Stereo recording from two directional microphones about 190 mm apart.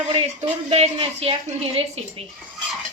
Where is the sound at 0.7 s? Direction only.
30° right (ahead or behind).